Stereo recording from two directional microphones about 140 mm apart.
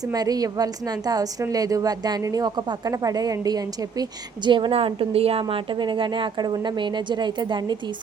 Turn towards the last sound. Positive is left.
turn(degrees=-30)  # may be behind; listen again after turning